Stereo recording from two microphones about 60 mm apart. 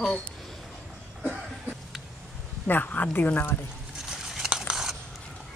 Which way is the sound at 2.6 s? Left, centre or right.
Left.